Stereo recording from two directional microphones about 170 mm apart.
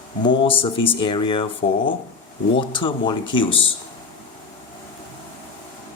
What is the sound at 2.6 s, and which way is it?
Speech, 30° left (ahead or behind).